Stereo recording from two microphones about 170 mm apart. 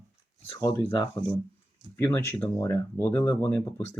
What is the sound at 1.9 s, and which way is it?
Speech, 10° left (ahead or behind).